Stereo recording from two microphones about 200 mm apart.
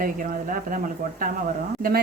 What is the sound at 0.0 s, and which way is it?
Speech, 40° right (ahead or behind).